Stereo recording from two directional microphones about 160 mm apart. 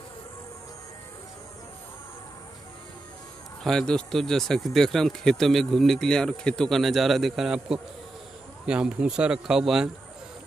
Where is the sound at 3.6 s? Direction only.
5° left (ahead or behind).